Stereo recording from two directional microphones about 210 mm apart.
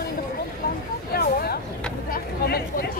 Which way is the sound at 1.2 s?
45° left (ahead or behind).